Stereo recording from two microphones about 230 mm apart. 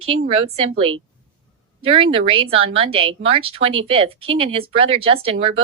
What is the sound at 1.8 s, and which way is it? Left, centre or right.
Speech, right.